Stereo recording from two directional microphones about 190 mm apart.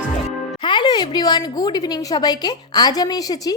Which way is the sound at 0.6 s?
25° left (ahead or behind).